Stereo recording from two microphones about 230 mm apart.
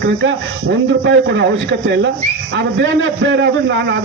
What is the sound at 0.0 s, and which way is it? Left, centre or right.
A man's voice, right.